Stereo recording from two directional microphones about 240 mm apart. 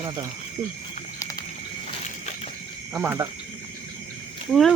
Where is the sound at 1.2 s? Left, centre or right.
Centre.